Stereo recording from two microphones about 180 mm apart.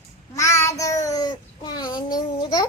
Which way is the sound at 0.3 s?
15° left (ahead or behind).